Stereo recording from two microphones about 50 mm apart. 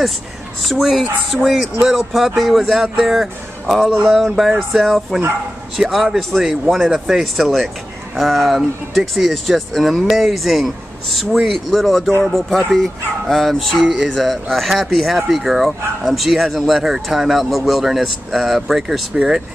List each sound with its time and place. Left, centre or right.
0.6 s speech: centre